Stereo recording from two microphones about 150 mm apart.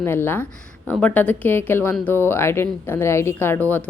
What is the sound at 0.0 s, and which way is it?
A woman's voice, 15° left (ahead or behind).